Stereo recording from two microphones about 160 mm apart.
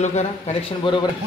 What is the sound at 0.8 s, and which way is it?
Speech, 30° left (ahead or behind).